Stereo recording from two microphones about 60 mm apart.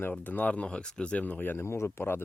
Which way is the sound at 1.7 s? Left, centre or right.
Left.